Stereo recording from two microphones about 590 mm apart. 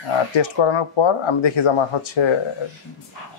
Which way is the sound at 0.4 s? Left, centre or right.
Left.